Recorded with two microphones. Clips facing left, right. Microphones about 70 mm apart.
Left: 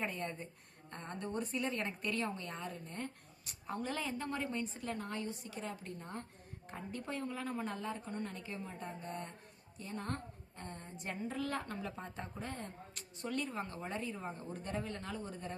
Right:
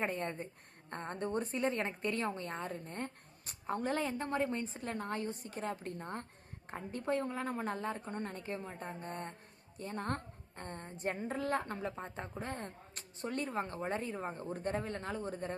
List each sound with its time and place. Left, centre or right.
0.0 s a woman's voice: right